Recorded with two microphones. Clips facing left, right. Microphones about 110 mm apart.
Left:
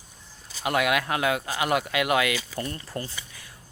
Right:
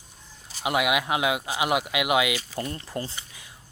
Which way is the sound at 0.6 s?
10° right (ahead or behind).